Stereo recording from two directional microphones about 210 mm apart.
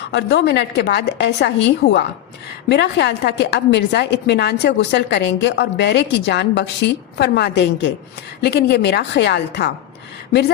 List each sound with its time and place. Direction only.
0.0 s a woman's voice: 55° left (ahead or behind)